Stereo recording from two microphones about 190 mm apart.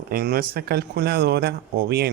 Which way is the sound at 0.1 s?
55° right (ahead or behind).